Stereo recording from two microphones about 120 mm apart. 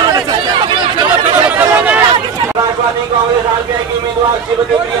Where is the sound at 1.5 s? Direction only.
15° right (ahead or behind).